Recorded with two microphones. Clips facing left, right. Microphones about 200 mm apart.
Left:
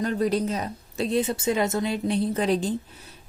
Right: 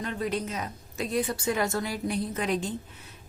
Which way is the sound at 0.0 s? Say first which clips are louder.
Left 7 dB; 40° left (ahead or behind).